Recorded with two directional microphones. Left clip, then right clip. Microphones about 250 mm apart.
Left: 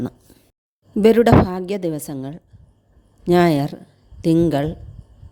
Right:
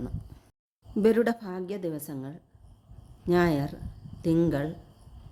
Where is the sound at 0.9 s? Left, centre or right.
Left.